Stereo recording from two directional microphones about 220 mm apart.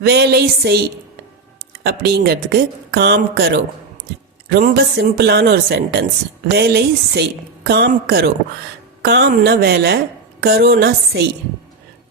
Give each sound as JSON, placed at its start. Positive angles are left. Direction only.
{"t": 0.0, "sound": "a woman's voice", "side_deg": -45}